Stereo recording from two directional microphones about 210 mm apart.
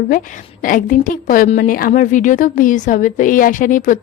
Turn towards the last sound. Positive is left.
turn(degrees=40)  # may be behind; listen again after turning